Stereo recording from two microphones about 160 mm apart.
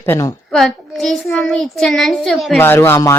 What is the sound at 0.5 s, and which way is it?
A child's voice, centre (ahead or behind).